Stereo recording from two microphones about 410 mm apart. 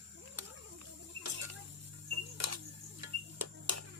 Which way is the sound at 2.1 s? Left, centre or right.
Right.